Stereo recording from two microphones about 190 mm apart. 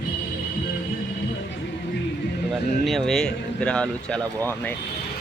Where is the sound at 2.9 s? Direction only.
Centre (ahead or behind).